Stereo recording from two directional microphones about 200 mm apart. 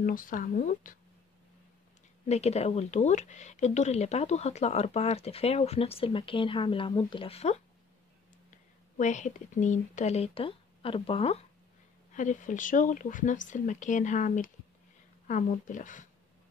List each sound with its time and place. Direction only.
0.0 s speech: 45° left (ahead or behind)
2.2 s speech: 30° left (ahead or behind)